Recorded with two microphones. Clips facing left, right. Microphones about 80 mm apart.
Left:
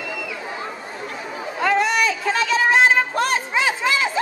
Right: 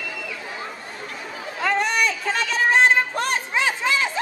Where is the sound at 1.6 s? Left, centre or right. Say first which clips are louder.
Left 3 dB; centre.